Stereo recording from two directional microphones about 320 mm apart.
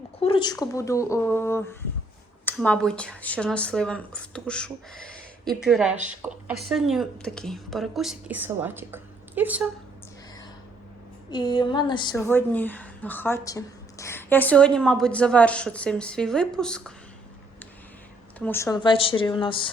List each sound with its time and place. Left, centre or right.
0.2 s a woman's voice: centre
11.3 s a woman's voice: centre
18.3 s speech: centre